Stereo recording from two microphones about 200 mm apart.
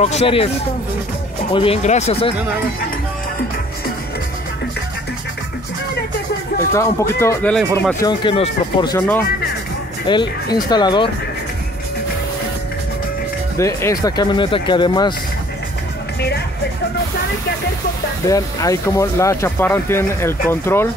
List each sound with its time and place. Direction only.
0.0 s speech: 30° left (ahead or behind)
1.5 s speech: 25° left (ahead or behind)
6.7 s speech: 15° left (ahead or behind)
7.5 s speech: centre (ahead or behind)
8.0 s speech: 25° left (ahead or behind)
10.0 s speech: 20° left (ahead or behind)
13.6 s speech: 15° left (ahead or behind)
18.3 s speech: 15° left (ahead or behind)